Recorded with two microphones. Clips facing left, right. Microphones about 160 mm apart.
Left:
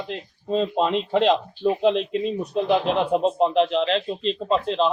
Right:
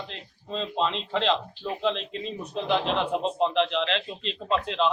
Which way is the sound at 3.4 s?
40° left (ahead or behind).